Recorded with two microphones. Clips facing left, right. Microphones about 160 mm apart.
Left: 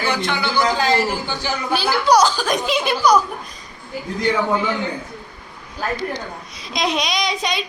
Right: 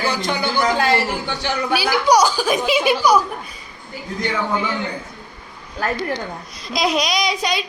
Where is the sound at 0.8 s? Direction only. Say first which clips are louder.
Even; 65° right (ahead or behind).